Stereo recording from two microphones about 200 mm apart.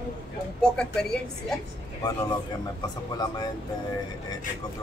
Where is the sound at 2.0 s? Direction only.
20° left (ahead or behind).